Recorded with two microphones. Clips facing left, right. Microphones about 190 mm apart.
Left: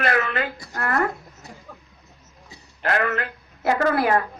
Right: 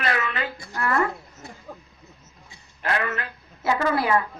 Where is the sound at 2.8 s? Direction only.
55° left (ahead or behind).